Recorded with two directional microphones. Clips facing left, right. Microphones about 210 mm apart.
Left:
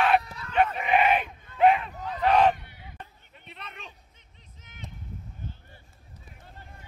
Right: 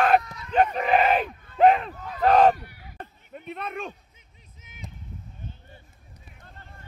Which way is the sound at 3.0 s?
50° right (ahead or behind).